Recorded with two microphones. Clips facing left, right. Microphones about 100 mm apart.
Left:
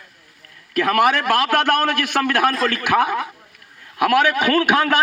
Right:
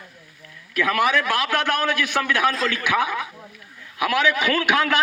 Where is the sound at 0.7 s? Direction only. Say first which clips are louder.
Left 4 dB; 65° left (ahead or behind).